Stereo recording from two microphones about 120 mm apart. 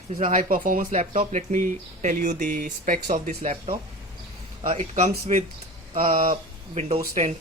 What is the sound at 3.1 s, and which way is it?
Speech, 70° right (ahead or behind).